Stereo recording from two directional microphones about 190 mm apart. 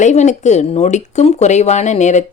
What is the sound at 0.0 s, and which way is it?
Speech, 40° left (ahead or behind).